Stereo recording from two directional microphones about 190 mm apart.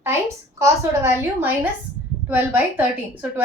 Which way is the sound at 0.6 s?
15° right (ahead or behind).